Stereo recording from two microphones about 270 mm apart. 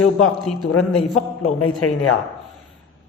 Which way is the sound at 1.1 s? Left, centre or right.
Left.